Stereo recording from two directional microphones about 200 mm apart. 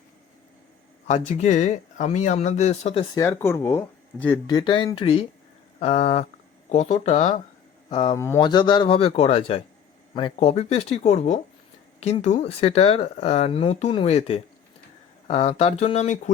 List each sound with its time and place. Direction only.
1.0 s speech: 35° left (ahead or behind)
3.2 s speech: 15° left (ahead or behind)
4.4 s a man's voice: 20° left (ahead or behind)
7.9 s a man's voice: 20° left (ahead or behind)